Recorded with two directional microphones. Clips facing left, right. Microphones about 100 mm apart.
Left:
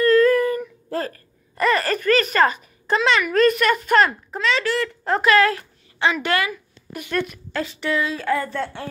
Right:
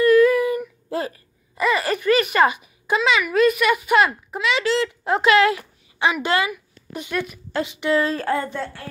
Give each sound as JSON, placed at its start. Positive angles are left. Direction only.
{"t": 0.0, "sound": "a sound", "side_deg": -15}
{"t": 1.5, "sound": "a child's voice", "side_deg": -5}
{"t": 7.9, "sound": "speech", "side_deg": -40}
{"t": 8.6, "sound": "speech", "side_deg": -5}